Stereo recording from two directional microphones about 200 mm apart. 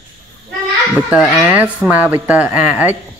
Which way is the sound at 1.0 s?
Centre (ahead or behind).